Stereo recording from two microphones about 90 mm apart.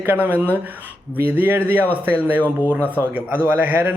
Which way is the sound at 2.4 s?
20° left (ahead or behind).